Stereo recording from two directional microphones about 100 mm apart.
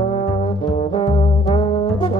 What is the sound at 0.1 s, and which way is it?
Brass instrument, 55° left (ahead or behind).